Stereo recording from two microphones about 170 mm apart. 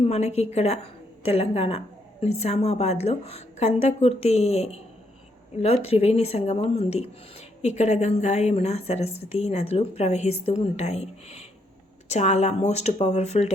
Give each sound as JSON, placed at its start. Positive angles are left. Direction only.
{"t": 0.0, "sound": "a woman's voice", "side_deg": 40}